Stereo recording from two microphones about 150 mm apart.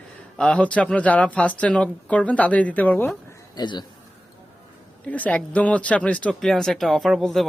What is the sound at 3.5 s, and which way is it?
Speech, 30° left (ahead or behind).